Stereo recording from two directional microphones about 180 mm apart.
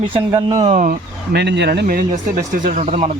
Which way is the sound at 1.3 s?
70° right (ahead or behind).